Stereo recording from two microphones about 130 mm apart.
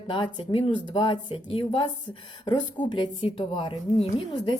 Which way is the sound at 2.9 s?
40° left (ahead or behind).